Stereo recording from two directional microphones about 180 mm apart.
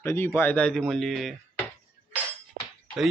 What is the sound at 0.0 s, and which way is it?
A man's voice, 15° left (ahead or behind).